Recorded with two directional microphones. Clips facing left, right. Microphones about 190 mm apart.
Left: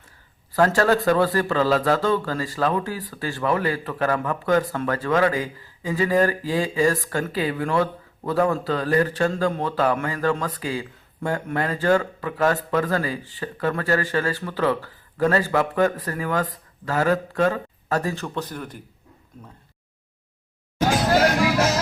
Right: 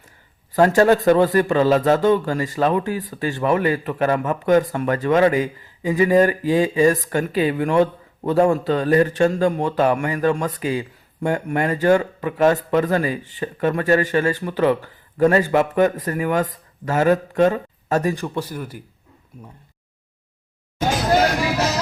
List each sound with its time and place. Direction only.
0.5 s a man's voice: 20° right (ahead or behind)